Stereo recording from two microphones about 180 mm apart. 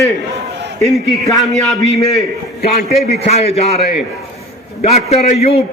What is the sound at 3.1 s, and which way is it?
Speech, 35° left (ahead or behind).